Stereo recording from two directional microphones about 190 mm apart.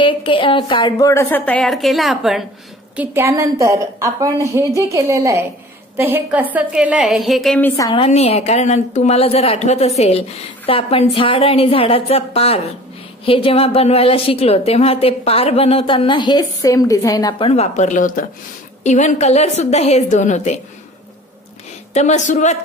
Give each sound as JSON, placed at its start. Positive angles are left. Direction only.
{"t": 0.0, "sound": "a woman's voice", "side_deg": 25}
{"t": 3.0, "sound": "a woman's voice", "side_deg": -15}
{"t": 7.7, "sound": "a woman's voice", "side_deg": 20}
{"t": 8.0, "sound": "a woman's voice", "side_deg": 30}
{"t": 17.5, "sound": "a woman's voice", "side_deg": 35}
{"t": 21.9, "sound": "a woman's voice", "side_deg": 40}